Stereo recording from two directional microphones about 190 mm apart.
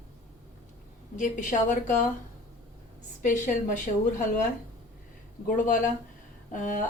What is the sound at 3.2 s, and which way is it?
A woman's voice, 40° left (ahead or behind).